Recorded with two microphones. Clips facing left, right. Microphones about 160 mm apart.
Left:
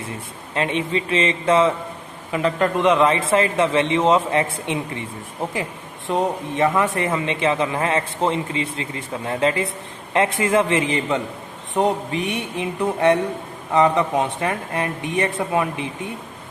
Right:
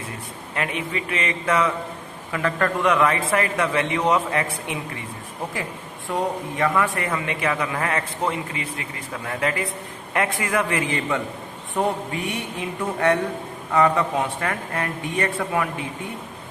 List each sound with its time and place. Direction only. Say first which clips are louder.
0.5 s speech: left 5 dB; 25° left (ahead or behind)
6.1 s speech: left 3 dB; 20° left (ahead or behind)